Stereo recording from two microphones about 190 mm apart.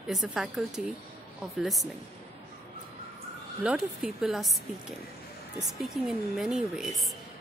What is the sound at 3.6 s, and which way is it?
A woman's voice, 5° right (ahead or behind).